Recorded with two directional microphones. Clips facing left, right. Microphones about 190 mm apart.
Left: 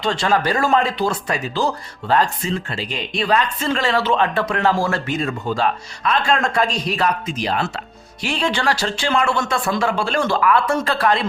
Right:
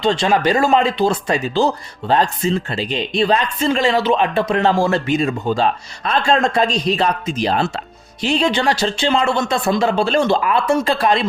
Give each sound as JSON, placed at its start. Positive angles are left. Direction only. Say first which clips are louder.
{"t": 0.0, "sound": "speech", "louder": "right 3 dB", "side_deg": -20}
{"t": 8.2, "sound": "speech", "louder": "right 4 dB", "side_deg": -20}